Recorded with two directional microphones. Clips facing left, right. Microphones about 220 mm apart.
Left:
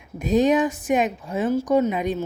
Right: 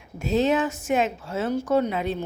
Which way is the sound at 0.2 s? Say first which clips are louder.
Left 3 dB; 15° left (ahead or behind).